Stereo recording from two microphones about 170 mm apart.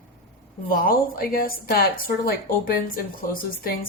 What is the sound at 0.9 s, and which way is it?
A woman's voice, 60° left (ahead or behind).